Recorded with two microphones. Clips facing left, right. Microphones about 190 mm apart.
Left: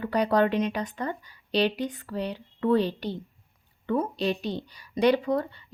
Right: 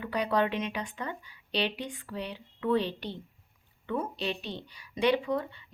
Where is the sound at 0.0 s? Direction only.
40° left (ahead or behind).